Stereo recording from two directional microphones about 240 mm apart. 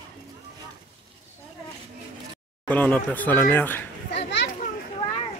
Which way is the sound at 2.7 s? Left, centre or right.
Centre.